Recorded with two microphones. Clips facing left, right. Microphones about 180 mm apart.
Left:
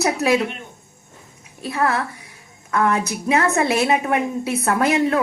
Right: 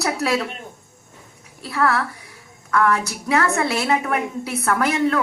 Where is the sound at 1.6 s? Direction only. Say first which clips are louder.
Even; 20° left (ahead or behind).